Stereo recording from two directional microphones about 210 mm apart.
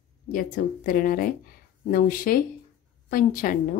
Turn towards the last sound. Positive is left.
turn(degrees=40)  # may be behind; listen again after turning